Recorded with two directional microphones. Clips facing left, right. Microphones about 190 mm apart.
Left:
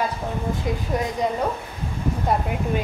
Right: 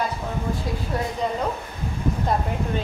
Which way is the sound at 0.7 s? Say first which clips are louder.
Left 3 dB; 20° left (ahead or behind).